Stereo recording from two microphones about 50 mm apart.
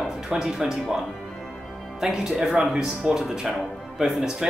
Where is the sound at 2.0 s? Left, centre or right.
Centre.